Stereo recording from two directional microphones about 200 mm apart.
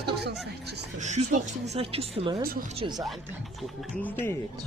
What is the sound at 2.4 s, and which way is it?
Speech, 50° right (ahead or behind).